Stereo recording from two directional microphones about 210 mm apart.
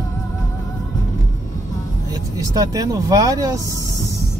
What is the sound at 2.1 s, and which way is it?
Speech, 15° right (ahead or behind).